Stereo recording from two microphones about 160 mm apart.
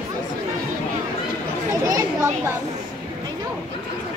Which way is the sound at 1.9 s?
20° right (ahead or behind).